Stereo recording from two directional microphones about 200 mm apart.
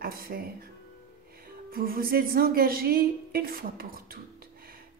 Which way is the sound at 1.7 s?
45° right (ahead or behind).